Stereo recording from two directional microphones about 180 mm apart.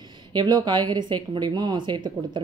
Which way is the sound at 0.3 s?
25° right (ahead or behind).